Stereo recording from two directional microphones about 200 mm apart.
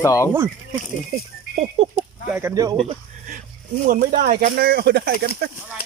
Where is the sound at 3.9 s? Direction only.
40° right (ahead or behind).